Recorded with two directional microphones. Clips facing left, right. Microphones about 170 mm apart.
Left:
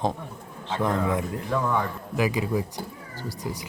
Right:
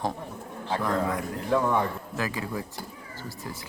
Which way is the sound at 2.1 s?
15° left (ahead or behind).